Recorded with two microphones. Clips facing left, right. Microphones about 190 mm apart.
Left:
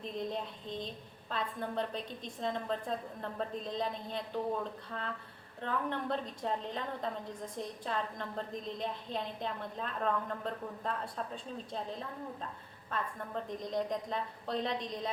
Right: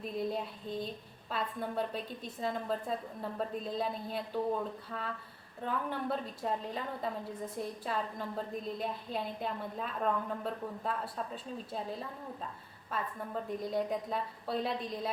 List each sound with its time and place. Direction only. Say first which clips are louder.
0.0 s a woman's voice: right 2 dB; 5° right (ahead or behind)